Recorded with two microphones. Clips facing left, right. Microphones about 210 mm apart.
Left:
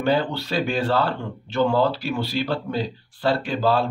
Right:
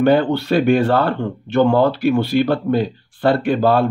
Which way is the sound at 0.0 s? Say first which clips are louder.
Right 8 dB; 55° right (ahead or behind).